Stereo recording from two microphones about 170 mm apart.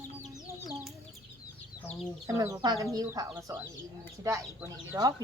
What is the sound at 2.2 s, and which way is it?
Speech, 20° right (ahead or behind).